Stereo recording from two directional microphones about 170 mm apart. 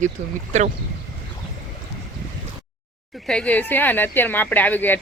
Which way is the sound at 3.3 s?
5° left (ahead or behind).